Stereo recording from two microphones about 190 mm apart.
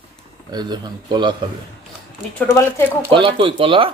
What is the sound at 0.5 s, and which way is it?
Speech, 20° right (ahead or behind).